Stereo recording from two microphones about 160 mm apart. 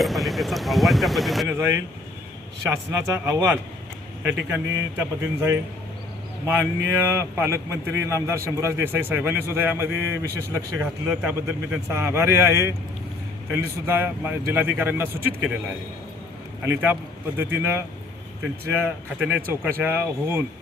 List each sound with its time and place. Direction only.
0.0 s speech: centre (ahead or behind)
1.5 s speech: 15° right (ahead or behind)
3.1 s speech: 20° right (ahead or behind)